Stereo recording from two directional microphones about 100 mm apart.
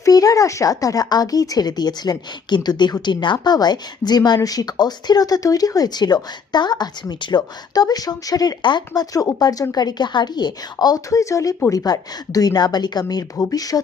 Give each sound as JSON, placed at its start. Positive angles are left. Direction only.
{"t": 0.0, "sound": "a woman's voice", "side_deg": 35}
{"t": 13.3, "sound": "a woman's voice", "side_deg": 35}